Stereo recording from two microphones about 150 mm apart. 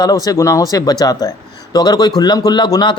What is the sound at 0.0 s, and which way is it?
A man's voice, 25° left (ahead or behind).